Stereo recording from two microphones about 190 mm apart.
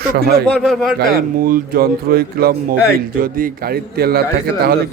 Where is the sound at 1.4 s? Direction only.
50° right (ahead or behind).